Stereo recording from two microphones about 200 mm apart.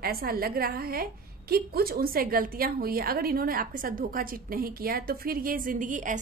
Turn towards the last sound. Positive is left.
turn(degrees=-40)  # may be behind; listen again after turning